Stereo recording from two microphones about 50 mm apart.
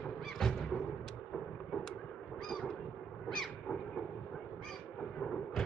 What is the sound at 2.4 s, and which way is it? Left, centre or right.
Honk, centre.